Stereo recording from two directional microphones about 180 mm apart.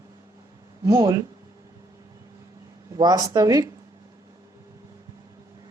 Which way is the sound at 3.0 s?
20° right (ahead or behind).